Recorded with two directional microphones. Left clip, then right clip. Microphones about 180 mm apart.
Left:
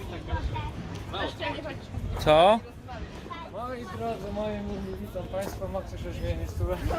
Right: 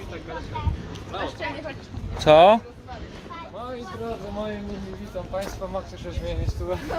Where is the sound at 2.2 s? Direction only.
40° right (ahead or behind).